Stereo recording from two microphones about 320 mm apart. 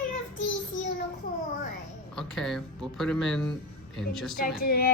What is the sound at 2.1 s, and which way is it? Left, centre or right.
Speech, centre.